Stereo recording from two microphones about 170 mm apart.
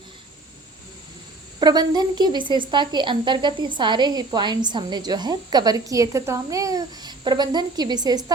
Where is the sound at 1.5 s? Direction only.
25° right (ahead or behind).